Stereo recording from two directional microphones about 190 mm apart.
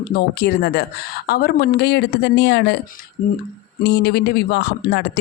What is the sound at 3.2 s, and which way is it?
Speech, 45° left (ahead or behind).